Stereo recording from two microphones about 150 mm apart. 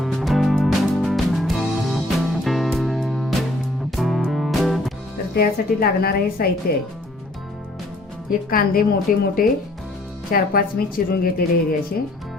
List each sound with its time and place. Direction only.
0.0 s music: centre (ahead or behind)
5.4 s a woman's voice: 90° left
8.4 s speech: 75° left (ahead or behind)